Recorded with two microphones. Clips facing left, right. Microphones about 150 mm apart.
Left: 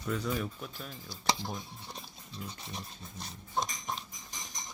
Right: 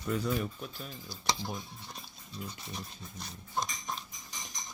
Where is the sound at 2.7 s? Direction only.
25° left (ahead or behind).